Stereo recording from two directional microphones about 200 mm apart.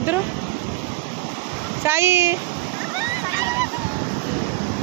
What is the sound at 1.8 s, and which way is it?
Speech, 10° right (ahead or behind).